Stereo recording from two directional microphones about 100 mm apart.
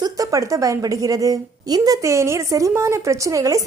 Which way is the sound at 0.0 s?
35° right (ahead or behind).